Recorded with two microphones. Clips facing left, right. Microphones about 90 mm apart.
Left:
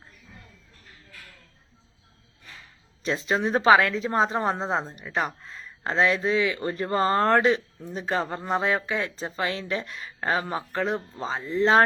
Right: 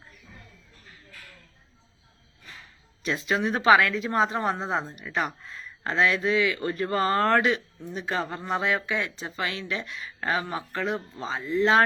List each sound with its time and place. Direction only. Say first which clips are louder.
3.0 s speech: left 1 dB; 30° left (ahead or behind)